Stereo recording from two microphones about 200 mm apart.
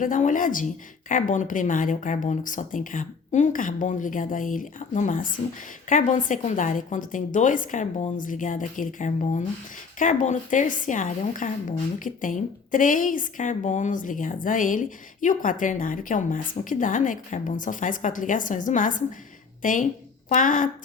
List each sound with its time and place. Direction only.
0.0 s a woman's voice: 40° left (ahead or behind)